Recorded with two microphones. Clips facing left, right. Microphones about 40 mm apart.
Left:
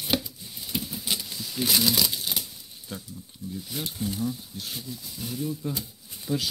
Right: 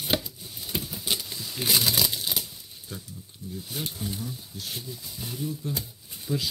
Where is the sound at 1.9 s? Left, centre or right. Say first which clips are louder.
Left 1 dB; right.